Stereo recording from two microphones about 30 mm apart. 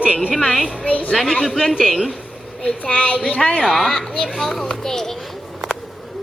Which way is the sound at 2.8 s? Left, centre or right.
Left.